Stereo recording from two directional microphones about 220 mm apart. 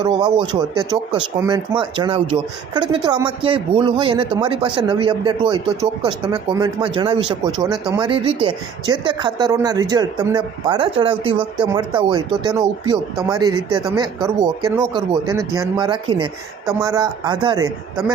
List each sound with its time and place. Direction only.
0.0 s speech: 20° right (ahead or behind)
13.7 s speech: 20° right (ahead or behind)